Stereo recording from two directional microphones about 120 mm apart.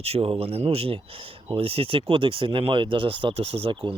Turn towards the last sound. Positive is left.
turn(degrees=-45)  # may be behind; listen again after turning